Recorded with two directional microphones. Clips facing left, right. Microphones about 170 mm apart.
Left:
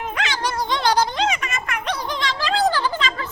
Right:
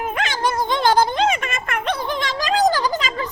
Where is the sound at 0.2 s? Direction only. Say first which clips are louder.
Right 2 dB; 50° right (ahead or behind).